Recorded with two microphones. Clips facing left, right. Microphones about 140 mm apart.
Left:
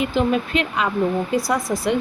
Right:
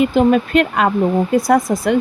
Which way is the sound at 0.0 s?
50° right (ahead or behind).